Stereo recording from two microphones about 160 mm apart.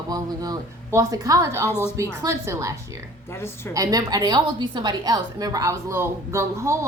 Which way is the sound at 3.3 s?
15° left (ahead or behind).